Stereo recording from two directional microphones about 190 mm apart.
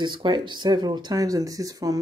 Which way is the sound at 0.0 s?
25° right (ahead or behind).